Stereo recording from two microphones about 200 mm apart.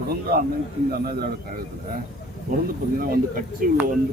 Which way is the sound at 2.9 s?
45° right (ahead or behind).